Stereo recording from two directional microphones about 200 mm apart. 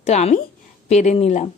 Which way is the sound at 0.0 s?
35° left (ahead or behind).